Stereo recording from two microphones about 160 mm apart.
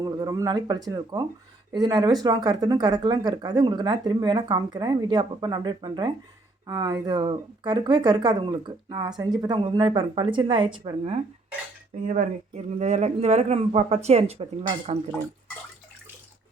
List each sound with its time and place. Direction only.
0.0 s a woman's voice: 20° right (ahead or behind)
11.9 s speech: 55° right (ahead or behind)